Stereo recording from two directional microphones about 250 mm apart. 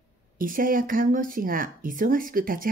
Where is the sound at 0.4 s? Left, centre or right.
Right.